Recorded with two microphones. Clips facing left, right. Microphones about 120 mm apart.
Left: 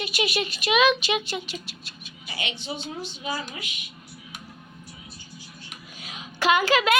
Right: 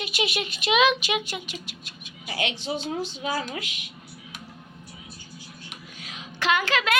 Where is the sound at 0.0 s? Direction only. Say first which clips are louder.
Left 2 dB; 20° right (ahead or behind).